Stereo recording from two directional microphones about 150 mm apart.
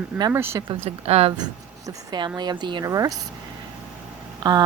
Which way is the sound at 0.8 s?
40° right (ahead or behind).